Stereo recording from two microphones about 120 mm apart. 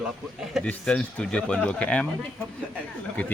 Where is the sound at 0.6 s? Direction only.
10° left (ahead or behind).